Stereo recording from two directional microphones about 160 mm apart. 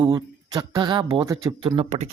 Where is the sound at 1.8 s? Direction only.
45° right (ahead or behind).